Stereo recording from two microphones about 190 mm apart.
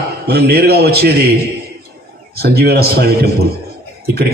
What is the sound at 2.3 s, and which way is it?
Speech, 55° right (ahead or behind).